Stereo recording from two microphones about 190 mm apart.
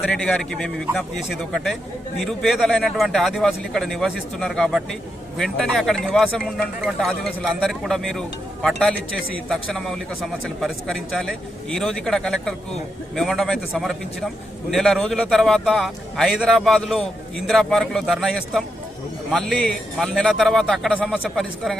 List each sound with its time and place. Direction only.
0.1 s a man's voice: centre (ahead or behind)